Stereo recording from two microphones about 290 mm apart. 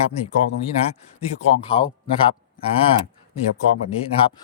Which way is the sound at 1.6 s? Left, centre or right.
Centre.